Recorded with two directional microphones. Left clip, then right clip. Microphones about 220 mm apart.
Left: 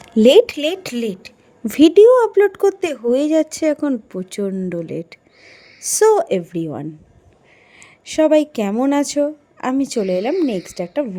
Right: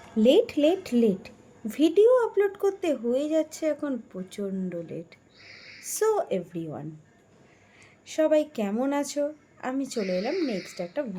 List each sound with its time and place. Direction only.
0.2 s a woman's voice: 50° left (ahead or behind)